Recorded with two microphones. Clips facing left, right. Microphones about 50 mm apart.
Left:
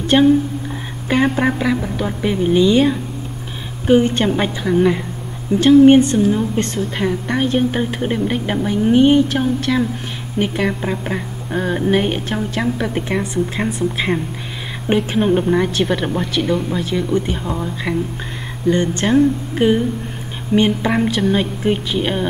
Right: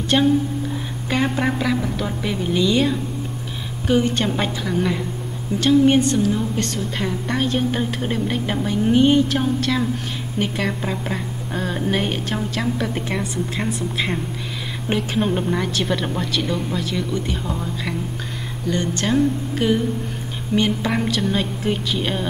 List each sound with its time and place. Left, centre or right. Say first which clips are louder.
0.0 s a woman's voice: left 5 dB; left
18.7 s a woman's voice: left 6 dB; left